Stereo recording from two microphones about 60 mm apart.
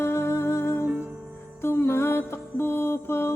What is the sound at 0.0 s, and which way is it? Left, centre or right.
Music, left.